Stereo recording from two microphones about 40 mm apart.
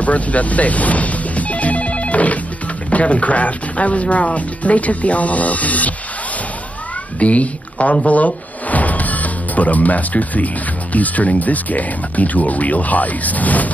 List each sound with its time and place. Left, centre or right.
0.0 s telephone bell ringing: left
2.9 s speech: left
7.2 s speech: left